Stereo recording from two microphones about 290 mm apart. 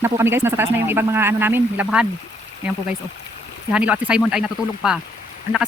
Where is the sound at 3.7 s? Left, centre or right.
Centre.